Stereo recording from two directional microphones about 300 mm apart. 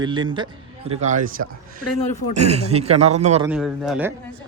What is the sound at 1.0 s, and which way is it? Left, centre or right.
Speech, right.